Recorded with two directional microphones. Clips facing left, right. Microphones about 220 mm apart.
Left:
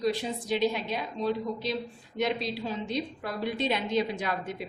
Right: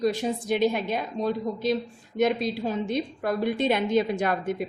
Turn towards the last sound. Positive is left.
turn(degrees=-50)  # may be behind; listen again after turning